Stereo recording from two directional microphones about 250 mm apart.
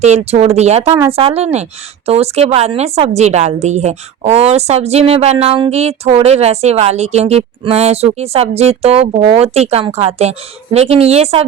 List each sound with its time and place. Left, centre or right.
0.0 s a woman's voice: right